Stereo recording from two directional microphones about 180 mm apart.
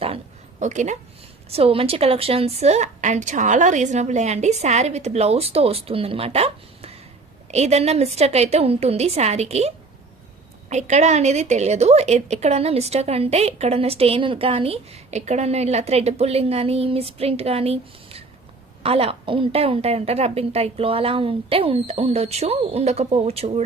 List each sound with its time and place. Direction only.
0.6 s a woman's voice: 40° right (ahead or behind)